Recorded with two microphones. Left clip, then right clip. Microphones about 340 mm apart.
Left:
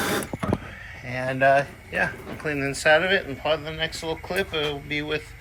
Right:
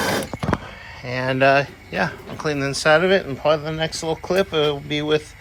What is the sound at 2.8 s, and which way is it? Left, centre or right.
Speech, centre.